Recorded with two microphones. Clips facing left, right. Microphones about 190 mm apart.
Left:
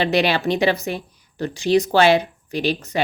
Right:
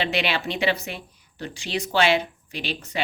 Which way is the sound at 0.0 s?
40° left (ahead or behind).